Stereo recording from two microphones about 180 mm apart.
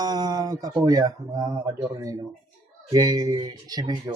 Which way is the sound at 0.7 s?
15° right (ahead or behind).